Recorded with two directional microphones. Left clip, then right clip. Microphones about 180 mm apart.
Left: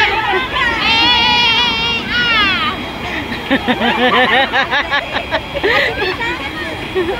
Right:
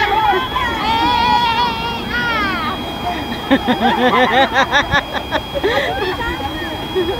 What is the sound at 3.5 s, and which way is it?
Speech, 5° right (ahead or behind).